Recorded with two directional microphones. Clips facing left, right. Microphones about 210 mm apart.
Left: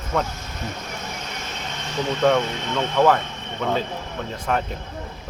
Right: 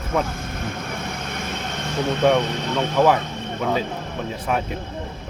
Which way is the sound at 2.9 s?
10° right (ahead or behind).